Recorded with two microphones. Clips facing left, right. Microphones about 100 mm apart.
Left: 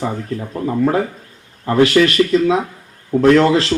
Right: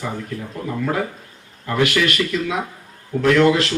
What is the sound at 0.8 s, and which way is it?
Speech, 35° left (ahead or behind).